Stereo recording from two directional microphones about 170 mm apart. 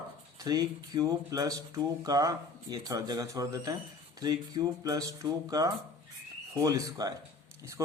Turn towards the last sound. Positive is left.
turn(degrees=-20)  # may be behind; listen again after turning